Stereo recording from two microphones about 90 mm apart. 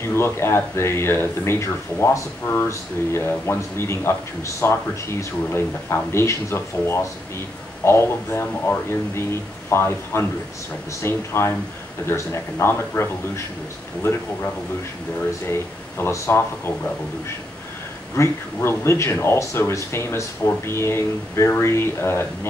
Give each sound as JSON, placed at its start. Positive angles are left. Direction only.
{"t": 0.0, "sound": "speech", "side_deg": 30}
{"t": 15.4, "sound": "speech", "side_deg": 30}
{"t": 18.1, "sound": "speech", "side_deg": 30}